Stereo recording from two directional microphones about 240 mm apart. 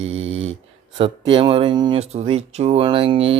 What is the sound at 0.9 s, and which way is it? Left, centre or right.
Speech, right.